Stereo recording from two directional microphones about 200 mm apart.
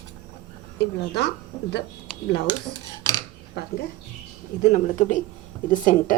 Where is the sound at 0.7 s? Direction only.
55° left (ahead or behind).